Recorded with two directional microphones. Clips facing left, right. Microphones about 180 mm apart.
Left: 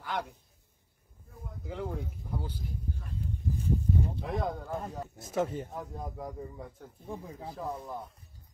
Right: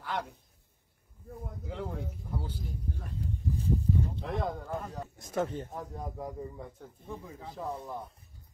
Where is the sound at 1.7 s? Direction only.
Centre (ahead or behind).